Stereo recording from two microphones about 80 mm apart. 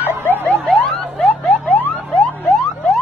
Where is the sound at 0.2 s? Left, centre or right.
Left.